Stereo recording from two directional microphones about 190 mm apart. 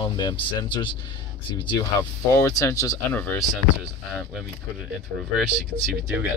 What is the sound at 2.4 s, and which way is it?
Speech, 15° left (ahead or behind).